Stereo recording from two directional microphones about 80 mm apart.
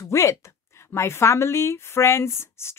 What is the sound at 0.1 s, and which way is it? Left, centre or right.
Speech, left.